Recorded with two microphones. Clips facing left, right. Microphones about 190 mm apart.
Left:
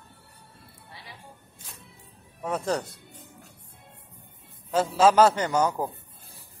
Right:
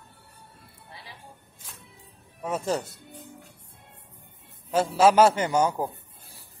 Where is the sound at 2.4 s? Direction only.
5° right (ahead or behind).